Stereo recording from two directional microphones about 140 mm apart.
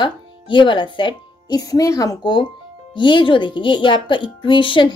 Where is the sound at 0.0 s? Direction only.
35° left (ahead or behind).